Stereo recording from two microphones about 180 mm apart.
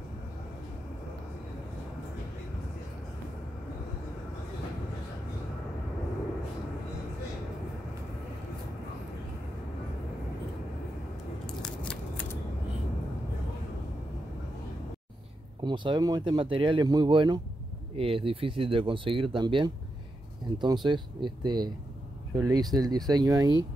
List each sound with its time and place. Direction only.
11.4 s scissors: 5° left (ahead or behind)
15.6 s speech: 25° right (ahead or behind)